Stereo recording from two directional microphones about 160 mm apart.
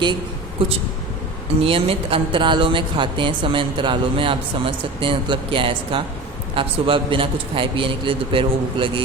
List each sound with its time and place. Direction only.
1.6 s speech: 35° right (ahead or behind)